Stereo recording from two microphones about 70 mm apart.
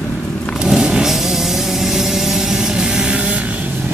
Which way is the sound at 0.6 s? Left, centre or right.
Centre.